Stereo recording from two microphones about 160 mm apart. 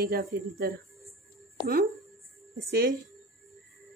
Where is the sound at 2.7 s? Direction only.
70° right (ahead or behind).